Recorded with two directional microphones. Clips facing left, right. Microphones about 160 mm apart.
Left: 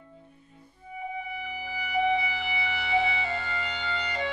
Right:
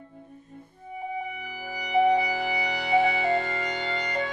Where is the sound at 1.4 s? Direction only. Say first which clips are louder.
Even; 45° right (ahead or behind).